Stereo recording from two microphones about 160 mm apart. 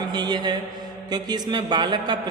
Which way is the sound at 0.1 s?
25° right (ahead or behind).